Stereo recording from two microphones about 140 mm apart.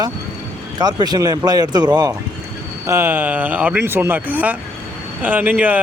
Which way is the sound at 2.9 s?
15° right (ahead or behind).